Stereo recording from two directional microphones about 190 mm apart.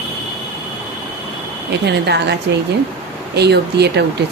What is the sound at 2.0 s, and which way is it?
A woman's voice, 60° right (ahead or behind).